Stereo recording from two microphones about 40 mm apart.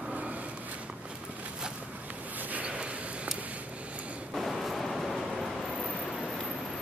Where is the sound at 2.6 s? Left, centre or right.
Right.